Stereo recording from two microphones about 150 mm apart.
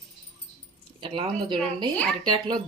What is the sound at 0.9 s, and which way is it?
Speech, 35° right (ahead or behind).